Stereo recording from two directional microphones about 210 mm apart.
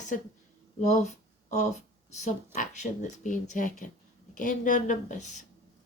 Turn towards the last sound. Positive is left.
turn(degrees=35)  # may be behind; listen again after turning